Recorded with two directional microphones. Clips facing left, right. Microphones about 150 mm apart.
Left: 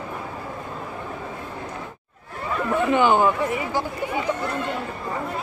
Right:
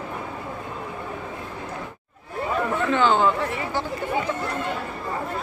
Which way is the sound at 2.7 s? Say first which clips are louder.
Left 3 dB; 15° left (ahead or behind).